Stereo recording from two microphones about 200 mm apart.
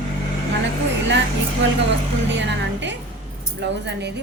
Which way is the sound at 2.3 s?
65° right (ahead or behind).